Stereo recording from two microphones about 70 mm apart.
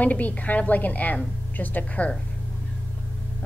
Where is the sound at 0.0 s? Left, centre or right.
Left.